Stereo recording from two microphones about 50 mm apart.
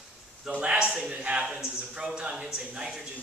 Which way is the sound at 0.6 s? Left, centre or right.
Centre.